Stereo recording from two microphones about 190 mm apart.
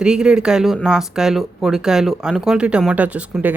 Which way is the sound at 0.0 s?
5° right (ahead or behind).